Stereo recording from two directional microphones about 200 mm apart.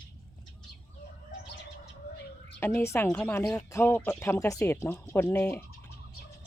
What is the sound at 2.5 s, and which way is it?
Speech, 10° left (ahead or behind).